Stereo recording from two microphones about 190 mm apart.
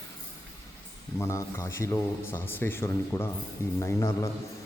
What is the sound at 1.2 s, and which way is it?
A man's voice, 15° left (ahead or behind).